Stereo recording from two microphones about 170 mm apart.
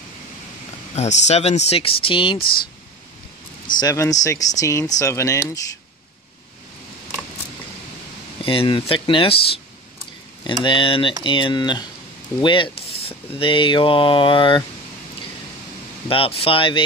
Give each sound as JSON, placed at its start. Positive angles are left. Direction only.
{"t": 0.9, "sound": "speech", "side_deg": 40}
{"t": 3.8, "sound": "speech", "side_deg": 20}
{"t": 8.5, "sound": "speech", "side_deg": 30}
{"t": 16.1, "sound": "speech", "side_deg": 35}